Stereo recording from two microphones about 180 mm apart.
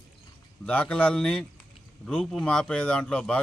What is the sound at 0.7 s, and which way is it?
A man's voice, 10° left (ahead or behind).